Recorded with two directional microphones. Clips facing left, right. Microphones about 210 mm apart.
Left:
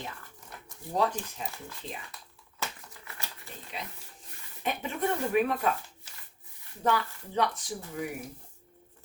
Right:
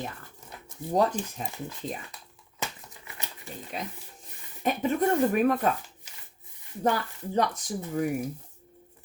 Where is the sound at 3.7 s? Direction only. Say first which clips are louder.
Right 4 dB; 45° right (ahead or behind).